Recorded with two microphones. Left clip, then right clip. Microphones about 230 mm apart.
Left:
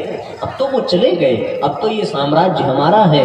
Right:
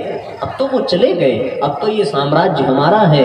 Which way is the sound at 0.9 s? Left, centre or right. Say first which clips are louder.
Even; right.